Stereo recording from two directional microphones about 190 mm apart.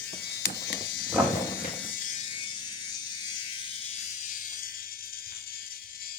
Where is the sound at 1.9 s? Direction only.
35° left (ahead or behind); by 5.3 s 50° left (ahead or behind).